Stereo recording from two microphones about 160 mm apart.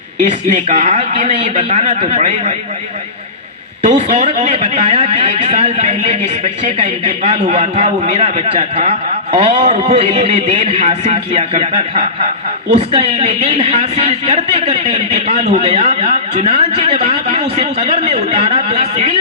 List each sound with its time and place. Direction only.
0.2 s a man's voice: 45° right (ahead or behind)
3.8 s a man's voice: 45° right (ahead or behind)